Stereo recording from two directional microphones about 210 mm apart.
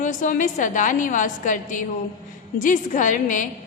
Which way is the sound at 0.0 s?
40° left (ahead or behind).